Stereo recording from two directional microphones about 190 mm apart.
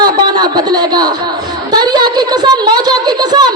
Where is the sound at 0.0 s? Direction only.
20° right (ahead or behind).